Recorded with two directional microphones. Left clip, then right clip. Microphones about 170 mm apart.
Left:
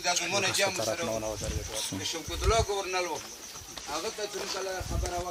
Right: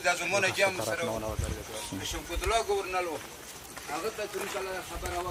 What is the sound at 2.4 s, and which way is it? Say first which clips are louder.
Speech: left 1 dB; 55° right (ahead or behind).